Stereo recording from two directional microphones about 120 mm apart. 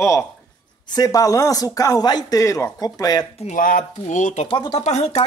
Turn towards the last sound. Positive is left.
turn(degrees=65)  # may be behind; listen again after turning